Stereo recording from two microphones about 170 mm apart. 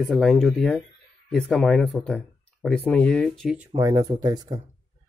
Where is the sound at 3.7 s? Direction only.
20° right (ahead or behind).